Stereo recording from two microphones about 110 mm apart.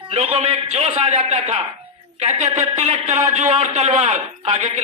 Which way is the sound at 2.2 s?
90° right.